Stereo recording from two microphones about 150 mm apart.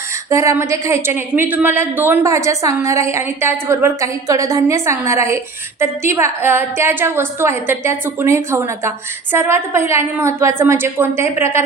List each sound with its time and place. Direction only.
0.3 s a woman's voice: 20° right (ahead or behind)